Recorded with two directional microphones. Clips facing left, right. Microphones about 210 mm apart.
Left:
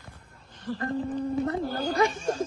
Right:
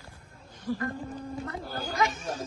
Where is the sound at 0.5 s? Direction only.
10° right (ahead or behind).